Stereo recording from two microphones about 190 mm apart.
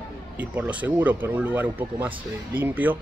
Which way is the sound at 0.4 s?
10° right (ahead or behind).